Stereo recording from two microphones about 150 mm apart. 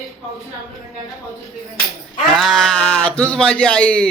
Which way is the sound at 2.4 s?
Centre (ahead or behind).